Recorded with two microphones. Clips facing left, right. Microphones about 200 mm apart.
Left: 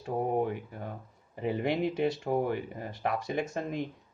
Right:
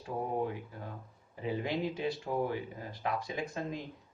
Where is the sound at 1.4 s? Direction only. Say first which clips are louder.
Left 5 dB; 60° left (ahead or behind).